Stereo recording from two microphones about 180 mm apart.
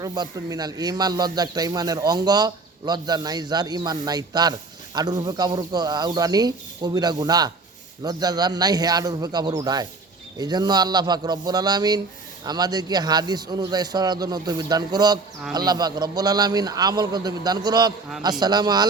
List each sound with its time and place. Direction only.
0.0 s speech: 20° right (ahead or behind)